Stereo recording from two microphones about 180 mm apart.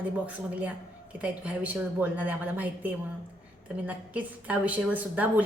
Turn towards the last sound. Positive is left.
turn(degrees=-10)  # may be behind; listen again after turning